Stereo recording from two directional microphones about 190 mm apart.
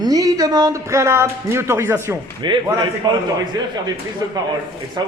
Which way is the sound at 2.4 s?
25° right (ahead or behind).